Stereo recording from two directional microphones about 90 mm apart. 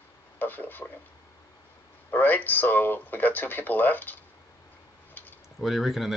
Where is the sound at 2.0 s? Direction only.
20° left (ahead or behind).